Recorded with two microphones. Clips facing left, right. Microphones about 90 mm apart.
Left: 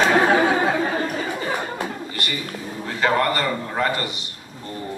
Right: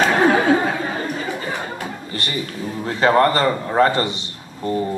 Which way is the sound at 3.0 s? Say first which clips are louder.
Right 5 dB; 30° right (ahead or behind).